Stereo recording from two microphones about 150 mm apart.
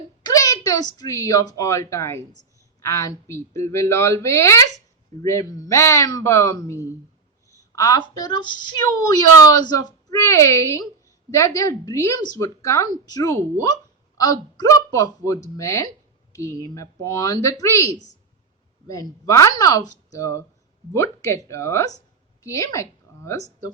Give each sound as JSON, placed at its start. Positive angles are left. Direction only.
{"t": 0.2, "sound": "a woman's voice", "side_deg": 25}